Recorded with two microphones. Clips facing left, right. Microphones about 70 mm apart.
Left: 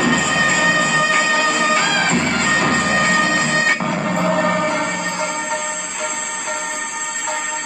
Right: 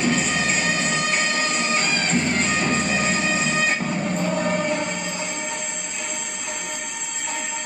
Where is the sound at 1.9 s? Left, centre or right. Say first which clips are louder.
Left 5 dB; left.